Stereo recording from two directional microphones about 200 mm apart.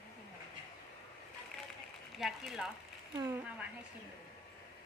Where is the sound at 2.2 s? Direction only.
Centre (ahead or behind).